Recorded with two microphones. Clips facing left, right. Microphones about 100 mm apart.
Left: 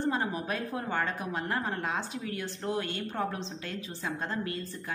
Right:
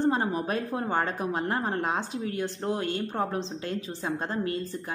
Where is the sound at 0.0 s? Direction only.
30° right (ahead or behind).